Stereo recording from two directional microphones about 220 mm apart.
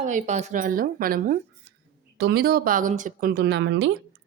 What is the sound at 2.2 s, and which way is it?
Speech, 50° right (ahead or behind).